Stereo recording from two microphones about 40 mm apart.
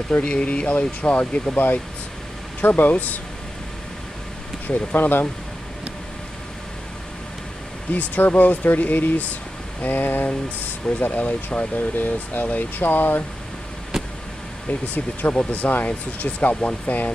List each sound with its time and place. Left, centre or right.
0.1 s speech: left
1.2 s speech: left
2.6 s speech: left
4.9 s speech: left
7.9 s speech: left
12.8 s speech: left
13.9 s vehicle: centre
14.7 s speech: left